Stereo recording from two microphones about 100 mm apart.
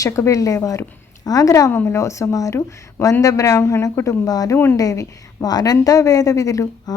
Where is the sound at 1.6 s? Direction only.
25° left (ahead or behind).